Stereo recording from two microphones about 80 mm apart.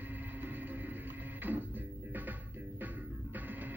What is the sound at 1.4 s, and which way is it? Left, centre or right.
Music, right.